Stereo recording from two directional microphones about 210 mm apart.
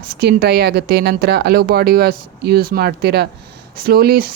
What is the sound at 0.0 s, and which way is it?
Speech, 50° right (ahead or behind).